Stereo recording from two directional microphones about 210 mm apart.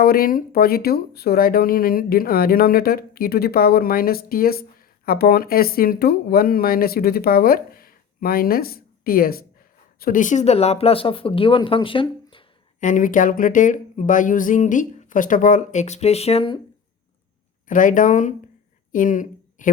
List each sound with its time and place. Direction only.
0.0 s speech: 45° left (ahead or behind); by 12.5 s 25° left (ahead or behind)
12.8 s speech: 40° left (ahead or behind)
17.7 s speech: 40° left (ahead or behind)